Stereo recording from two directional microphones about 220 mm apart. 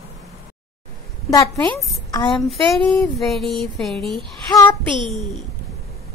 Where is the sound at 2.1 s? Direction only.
20° left (ahead or behind).